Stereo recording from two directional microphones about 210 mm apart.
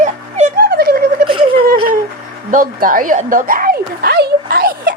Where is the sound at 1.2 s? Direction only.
25° right (ahead or behind).